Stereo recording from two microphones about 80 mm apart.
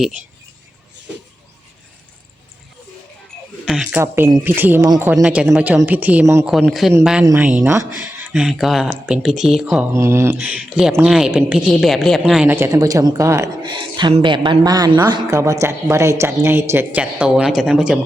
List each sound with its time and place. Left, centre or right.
3.9 s speech: right
5.2 s speech: centre
6.7 s speech: centre
8.3 s speech: centre
9.9 s speech: right
10.3 s speech: centre
11.0 s speech: centre
12.5 s speech: right
13.6 s speech: right
14.6 s a woman's voice: right
15.3 s speech: right
17.0 s speech: centre